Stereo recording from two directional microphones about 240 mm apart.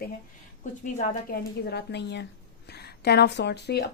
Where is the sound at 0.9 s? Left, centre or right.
Left.